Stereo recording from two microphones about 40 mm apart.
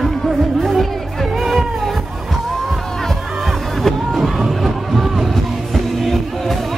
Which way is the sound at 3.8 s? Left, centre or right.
Centre.